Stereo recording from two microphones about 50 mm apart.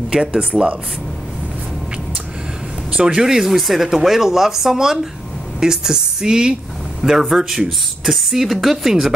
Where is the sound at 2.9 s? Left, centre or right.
Centre.